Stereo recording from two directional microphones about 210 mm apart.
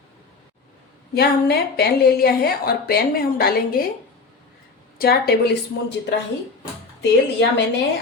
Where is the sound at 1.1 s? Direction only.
50° left (ahead or behind).